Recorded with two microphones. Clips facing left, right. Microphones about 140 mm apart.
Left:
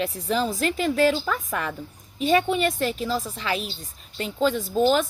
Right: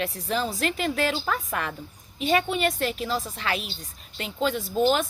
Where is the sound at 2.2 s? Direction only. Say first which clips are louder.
Left 3 dB; 35° left (ahead or behind).